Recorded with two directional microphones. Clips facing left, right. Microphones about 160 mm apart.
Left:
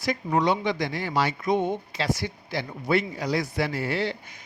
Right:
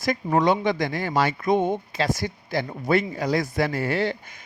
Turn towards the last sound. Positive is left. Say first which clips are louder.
# right 3 dB
turn(degrees=-50)  # may be behind; listen again after turning